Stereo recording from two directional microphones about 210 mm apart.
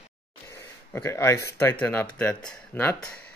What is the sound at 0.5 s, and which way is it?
Speech, 15° left (ahead or behind).